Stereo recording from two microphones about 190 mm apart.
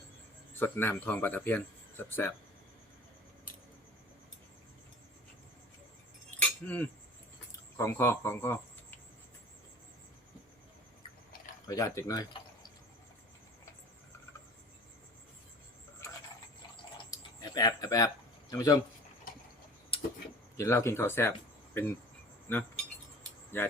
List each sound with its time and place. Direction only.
0.5 s speech: 10° left (ahead or behind)
6.4 s chink: 10° left (ahead or behind)
7.8 s speech: 10° left (ahead or behind)
11.7 s speech: 20° left (ahead or behind)
17.1 s a sound: 20° left (ahead or behind)
18.5 s speech: 20° left (ahead or behind)
20.6 s speech: 15° left (ahead or behind)